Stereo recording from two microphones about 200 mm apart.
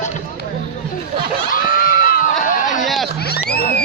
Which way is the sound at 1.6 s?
50° left (ahead or behind).